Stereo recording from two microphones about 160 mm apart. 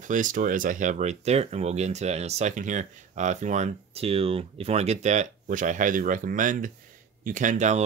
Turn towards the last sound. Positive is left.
turn(degrees=-50)  # may be behind; listen again after turning